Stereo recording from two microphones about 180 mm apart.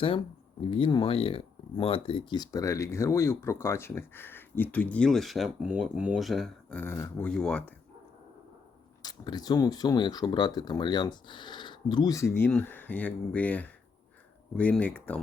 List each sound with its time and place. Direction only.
0.7 s speech: 25° left (ahead or behind); by 7.7 s 5° left (ahead or behind)
9.0 s speech: 20° left (ahead or behind)